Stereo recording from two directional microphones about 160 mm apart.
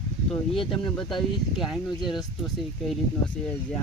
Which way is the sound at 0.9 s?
Centre (ahead or behind).